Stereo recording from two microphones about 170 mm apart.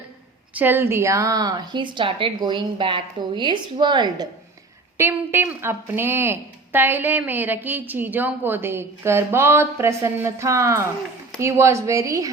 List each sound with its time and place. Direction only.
0.5 s a woman's voice: 10° right (ahead or behind)
4.9 s a woman's voice: 15° right (ahead or behind)